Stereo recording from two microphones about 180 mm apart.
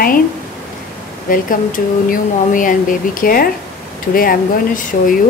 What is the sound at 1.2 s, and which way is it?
Speech, 50° left (ahead or behind).